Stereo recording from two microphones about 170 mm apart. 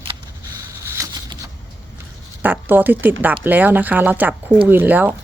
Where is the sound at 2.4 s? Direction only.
10° right (ahead or behind).